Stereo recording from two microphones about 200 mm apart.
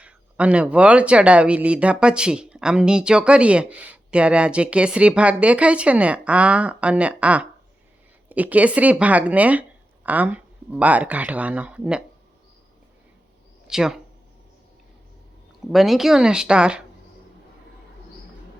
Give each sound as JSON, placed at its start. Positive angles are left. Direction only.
{"t": 0.0, "sound": "speech", "side_deg": -5}
{"t": 13.7, "sound": "speech", "side_deg": -5}
{"t": 15.7, "sound": "speech", "side_deg": 0}